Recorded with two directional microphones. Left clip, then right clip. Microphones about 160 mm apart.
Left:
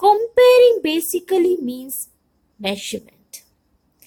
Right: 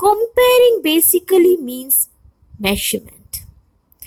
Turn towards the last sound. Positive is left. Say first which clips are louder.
# right 6 dB
turn(degrees=-25)  # may be behind; listen again after turning